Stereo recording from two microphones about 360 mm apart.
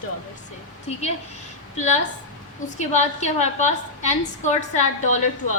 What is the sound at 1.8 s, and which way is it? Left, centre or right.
A woman's voice, centre.